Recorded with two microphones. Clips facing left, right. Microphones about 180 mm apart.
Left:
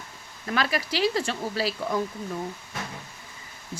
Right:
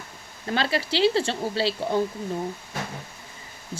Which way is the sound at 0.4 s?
30° right (ahead or behind).